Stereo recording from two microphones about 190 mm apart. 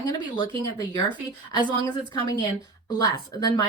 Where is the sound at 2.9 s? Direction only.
20° left (ahead or behind).